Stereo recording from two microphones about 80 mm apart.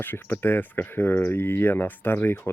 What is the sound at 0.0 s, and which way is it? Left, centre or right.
Speech, left.